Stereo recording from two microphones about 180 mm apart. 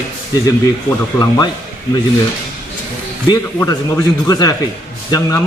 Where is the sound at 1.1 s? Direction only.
20° left (ahead or behind).